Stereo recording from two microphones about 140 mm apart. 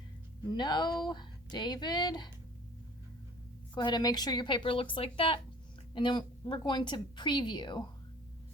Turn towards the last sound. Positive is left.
turn(degrees=35)  # may be behind; listen again after turning